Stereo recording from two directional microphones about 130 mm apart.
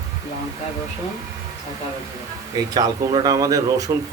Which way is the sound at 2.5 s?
30° right (ahead or behind).